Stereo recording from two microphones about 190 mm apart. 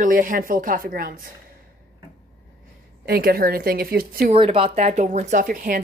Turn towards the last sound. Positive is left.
turn(degrees=-50)  # may be behind; listen again after turning